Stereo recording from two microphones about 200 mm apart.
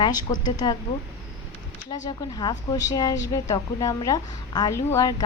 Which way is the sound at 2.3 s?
20° left (ahead or behind).